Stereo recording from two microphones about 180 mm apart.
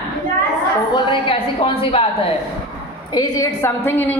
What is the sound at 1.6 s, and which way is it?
Speech, 30° left (ahead or behind).